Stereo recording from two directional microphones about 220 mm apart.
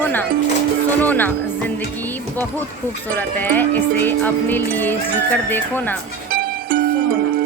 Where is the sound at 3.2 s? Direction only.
10° left (ahead or behind).